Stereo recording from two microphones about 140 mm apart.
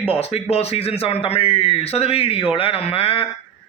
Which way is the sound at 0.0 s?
45° left (ahead or behind).